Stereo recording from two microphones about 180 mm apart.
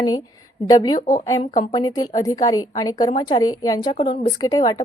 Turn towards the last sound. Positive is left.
turn(degrees=20)  # may be behind; listen again after turning